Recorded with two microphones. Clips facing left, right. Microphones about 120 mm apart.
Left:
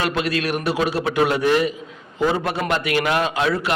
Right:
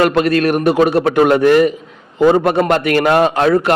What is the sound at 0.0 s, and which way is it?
A man's voice, 50° right (ahead or behind).